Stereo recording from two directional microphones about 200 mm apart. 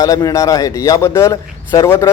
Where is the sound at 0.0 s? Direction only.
15° left (ahead or behind).